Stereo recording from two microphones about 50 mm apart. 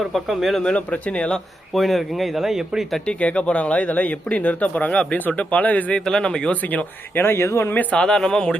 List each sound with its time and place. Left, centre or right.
0.1 s speech: centre
0.6 s speech: left
1.7 s speech: centre
3.1 s speech: left
6.1 s speech: centre
6.5 s speech: left
7.2 s speech: left
7.7 s speech: left
7.9 s speech: centre